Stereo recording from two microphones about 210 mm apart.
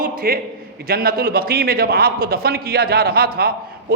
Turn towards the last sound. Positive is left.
turn(degrees=-45)  # may be behind; listen again after turning